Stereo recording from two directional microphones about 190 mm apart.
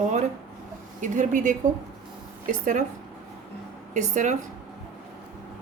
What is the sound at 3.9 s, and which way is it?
Speech, 40° right (ahead or behind).